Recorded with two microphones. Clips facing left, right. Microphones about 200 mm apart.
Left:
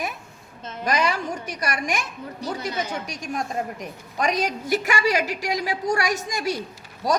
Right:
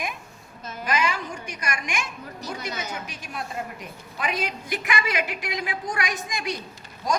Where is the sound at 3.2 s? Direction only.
45° left (ahead or behind).